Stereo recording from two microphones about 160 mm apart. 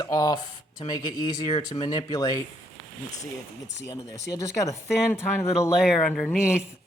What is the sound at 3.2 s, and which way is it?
Speech, 45° left (ahead or behind).